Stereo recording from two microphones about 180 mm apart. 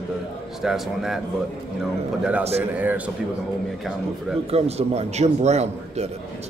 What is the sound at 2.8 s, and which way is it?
Speech, 10° right (ahead or behind).